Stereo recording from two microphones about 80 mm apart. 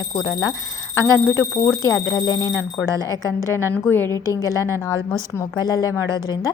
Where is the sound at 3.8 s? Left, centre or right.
Left.